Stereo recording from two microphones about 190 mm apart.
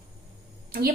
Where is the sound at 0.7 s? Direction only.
50° right (ahead or behind).